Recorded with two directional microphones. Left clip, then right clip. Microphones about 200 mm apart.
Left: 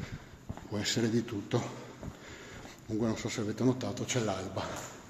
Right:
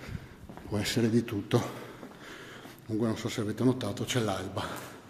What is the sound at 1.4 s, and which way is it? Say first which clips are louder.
Speech: right 4 dB; 45° right (ahead or behind).